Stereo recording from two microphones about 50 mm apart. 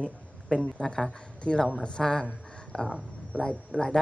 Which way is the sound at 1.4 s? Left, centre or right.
Centre.